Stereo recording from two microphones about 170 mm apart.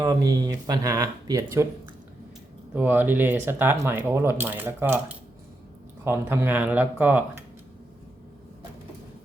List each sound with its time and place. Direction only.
0.0 s speech: 20° right (ahead or behind)
2.7 s speech: 10° right (ahead or behind)